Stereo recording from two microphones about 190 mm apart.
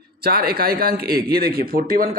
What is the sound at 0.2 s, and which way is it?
Speech, 55° right (ahead or behind).